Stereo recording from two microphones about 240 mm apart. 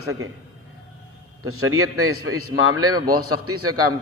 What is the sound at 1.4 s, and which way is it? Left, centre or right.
A man's voice, right.